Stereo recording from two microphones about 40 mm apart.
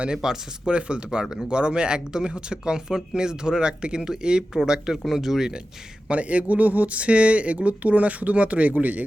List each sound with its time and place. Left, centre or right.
0.1 s speech: centre
0.7 s speech: right; by 5.5 s centre
6.1 s speech: right